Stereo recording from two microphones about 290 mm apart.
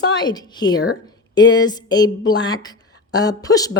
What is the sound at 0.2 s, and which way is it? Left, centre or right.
Speech, centre.